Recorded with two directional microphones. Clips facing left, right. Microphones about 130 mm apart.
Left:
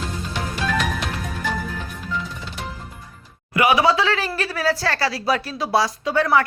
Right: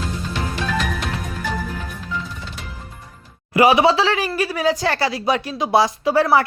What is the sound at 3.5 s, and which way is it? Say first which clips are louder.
Speech: right 3 dB; 30° right (ahead or behind).